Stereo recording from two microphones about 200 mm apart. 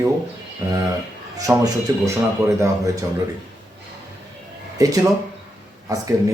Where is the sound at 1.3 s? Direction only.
15° right (ahead or behind).